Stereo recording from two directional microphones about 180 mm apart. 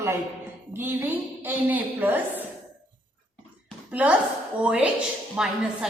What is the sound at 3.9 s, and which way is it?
A woman's voice, 10° right (ahead or behind).